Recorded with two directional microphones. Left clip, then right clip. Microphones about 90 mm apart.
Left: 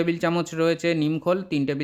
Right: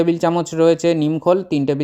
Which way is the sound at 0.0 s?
30° right (ahead or behind).